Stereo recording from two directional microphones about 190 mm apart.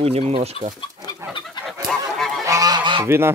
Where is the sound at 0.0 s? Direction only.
30° right (ahead or behind).